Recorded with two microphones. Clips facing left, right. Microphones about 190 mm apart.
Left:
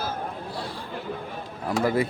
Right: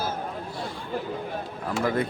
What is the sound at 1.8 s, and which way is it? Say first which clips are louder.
Speech: left 2 dB; 10° left (ahead or behind).